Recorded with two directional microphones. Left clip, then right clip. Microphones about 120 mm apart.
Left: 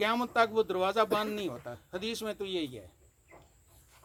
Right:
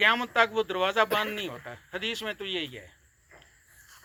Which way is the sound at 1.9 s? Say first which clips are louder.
Right 4 dB; 50° left (ahead or behind).